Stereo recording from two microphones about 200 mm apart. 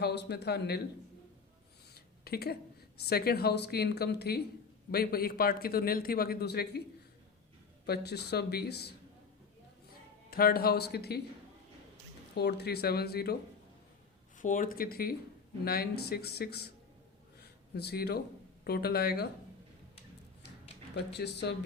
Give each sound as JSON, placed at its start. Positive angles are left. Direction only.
{"t": 0.0, "sound": "a man's voice", "side_deg": 55}
{"t": 1.9, "sound": "a sound", "side_deg": 50}
{"t": 3.0, "sound": "a man's voice", "side_deg": 50}
{"t": 7.9, "sound": "a man's voice", "side_deg": 55}
{"t": 10.2, "sound": "a man's voice", "side_deg": 50}
{"t": 12.4, "sound": "a man's voice", "side_deg": 55}
{"t": 14.3, "sound": "a man's voice", "side_deg": 40}
{"t": 17.4, "sound": "a sound", "side_deg": 55}
{"t": 18.6, "sound": "a man's voice", "side_deg": 50}
{"t": 20.9, "sound": "a man's voice", "side_deg": 55}